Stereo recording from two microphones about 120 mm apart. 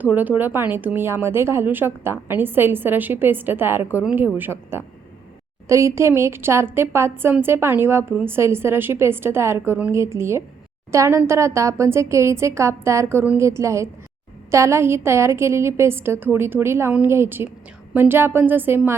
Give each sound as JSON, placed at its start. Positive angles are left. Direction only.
{"t": 0.0, "sound": "a woman's voice", "side_deg": -15}